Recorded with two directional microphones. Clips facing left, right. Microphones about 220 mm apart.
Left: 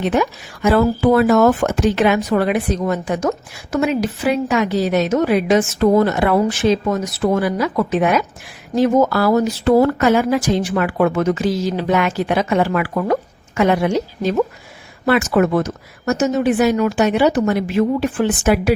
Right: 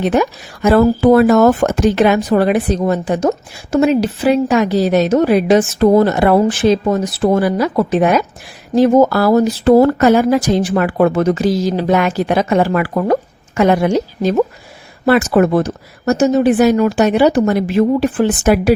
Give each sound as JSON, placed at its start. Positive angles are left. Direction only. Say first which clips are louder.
{"t": 0.0, "sound": "speech", "louder": "right 3 dB", "side_deg": -40}